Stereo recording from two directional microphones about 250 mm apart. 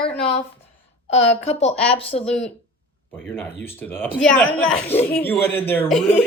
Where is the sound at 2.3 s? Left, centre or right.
Centre.